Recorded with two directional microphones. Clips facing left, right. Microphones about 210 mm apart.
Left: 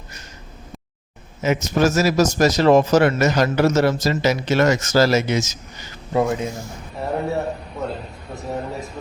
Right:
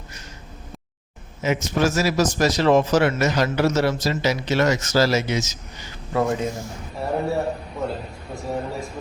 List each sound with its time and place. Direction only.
1.4 s speech: 40° left (ahead or behind)
6.9 s a man's voice: centre (ahead or behind)